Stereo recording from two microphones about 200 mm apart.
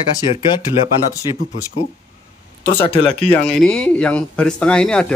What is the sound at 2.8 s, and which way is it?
Speech, 30° left (ahead or behind).